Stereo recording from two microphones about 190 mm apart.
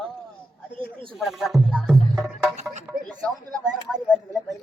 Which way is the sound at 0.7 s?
25° right (ahead or behind).